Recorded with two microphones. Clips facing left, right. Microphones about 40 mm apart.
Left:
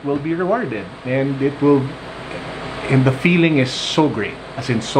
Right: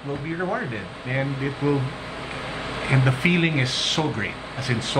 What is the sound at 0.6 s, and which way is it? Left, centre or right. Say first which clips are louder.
Speech: left 7 dB; left.